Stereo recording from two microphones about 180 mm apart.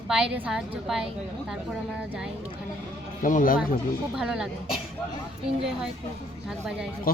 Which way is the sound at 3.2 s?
50° left (ahead or behind).